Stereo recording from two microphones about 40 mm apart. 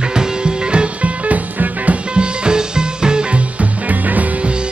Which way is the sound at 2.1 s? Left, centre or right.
Right.